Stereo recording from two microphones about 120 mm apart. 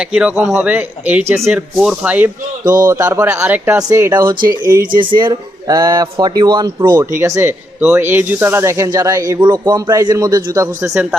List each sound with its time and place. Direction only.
0.0 s speech: 5° right (ahead or behind)